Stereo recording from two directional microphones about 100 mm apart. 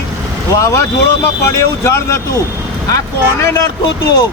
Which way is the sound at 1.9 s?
30° left (ahead or behind).